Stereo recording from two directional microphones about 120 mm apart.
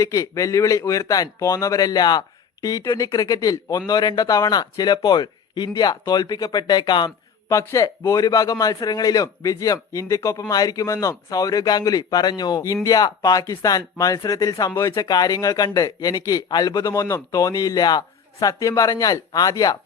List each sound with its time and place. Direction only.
0.0 s speech: 30° left (ahead or behind)
7.5 s speech: 30° left (ahead or behind)